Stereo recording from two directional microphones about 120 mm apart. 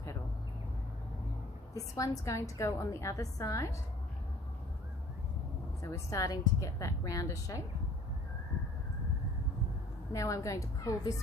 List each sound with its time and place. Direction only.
1.7 s a woman's voice: 25° left (ahead or behind)
5.9 s a woman's voice: 30° left (ahead or behind)
10.1 s a woman's voice: 25° left (ahead or behind)